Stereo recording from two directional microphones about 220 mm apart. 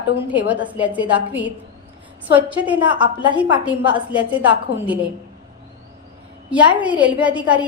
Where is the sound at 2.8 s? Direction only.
20° right (ahead or behind).